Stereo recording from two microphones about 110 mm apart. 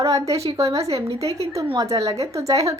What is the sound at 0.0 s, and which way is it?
A woman's voice, 30° right (ahead or behind).